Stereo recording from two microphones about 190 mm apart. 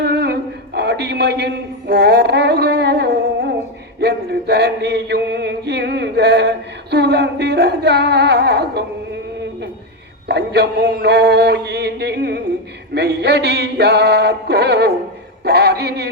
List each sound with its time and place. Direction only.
0.0 s a man's voice: 60° right (ahead or behind)
4.0 s chant: 60° right (ahead or behind)
10.2 s chant: 60° right (ahead or behind)